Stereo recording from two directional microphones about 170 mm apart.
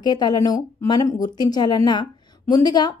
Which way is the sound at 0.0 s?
25° left (ahead or behind).